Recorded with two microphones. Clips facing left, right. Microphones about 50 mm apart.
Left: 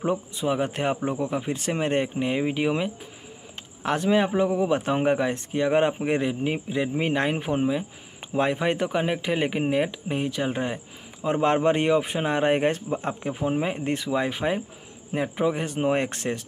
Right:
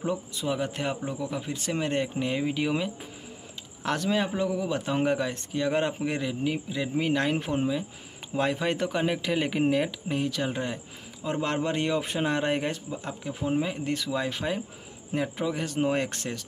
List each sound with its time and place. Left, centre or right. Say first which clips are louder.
0.0 s a man's voice: left 4 dB; left
12.0 s a man's voice: left 3 dB; centre
12.7 s speech: left 7 dB; left
13.3 s a man's voice: left 1 dB; left